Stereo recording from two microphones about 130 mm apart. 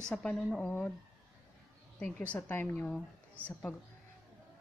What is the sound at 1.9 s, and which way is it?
A woman's voice, 10° left (ahead or behind).